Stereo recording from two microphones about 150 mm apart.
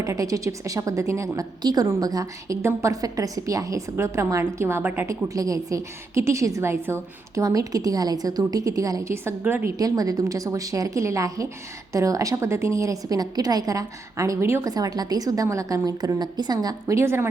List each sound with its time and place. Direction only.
0.0 s a woman's voice: 20° right (ahead or behind)
9.7 s a woman's voice: 25° right (ahead or behind)